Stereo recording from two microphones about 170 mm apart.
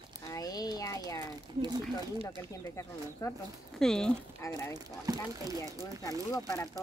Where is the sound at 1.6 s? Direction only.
25° right (ahead or behind).